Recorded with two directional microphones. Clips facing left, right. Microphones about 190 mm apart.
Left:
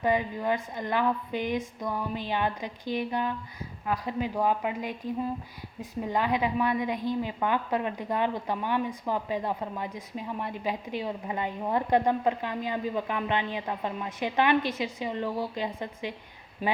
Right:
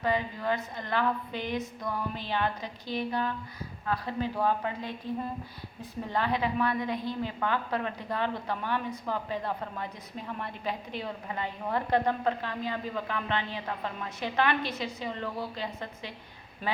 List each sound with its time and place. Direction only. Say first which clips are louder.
0.0 s a woman's voice: left 3 dB; 15° left (ahead or behind)
6.0 s a woman's voice: left 2 dB; 15° left (ahead or behind)